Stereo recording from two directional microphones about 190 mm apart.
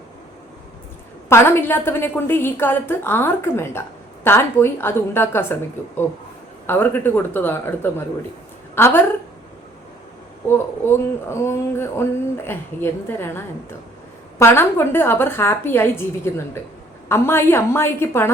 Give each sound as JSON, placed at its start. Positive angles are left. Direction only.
{"t": 1.3, "sound": "a woman's voice", "side_deg": 15}
{"t": 6.7, "sound": "a woman's voice", "side_deg": 10}
{"t": 10.8, "sound": "a woman's voice", "side_deg": 15}